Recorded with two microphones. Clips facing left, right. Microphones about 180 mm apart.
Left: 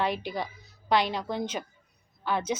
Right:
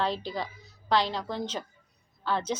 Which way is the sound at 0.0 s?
15° left (ahead or behind).